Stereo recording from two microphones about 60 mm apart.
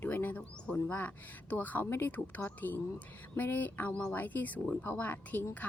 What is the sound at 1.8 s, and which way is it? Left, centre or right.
Speech, left.